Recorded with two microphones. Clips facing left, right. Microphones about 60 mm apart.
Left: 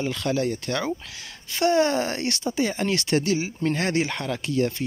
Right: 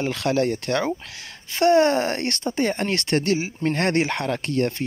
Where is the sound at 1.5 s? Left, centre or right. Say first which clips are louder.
Right 4 dB; right.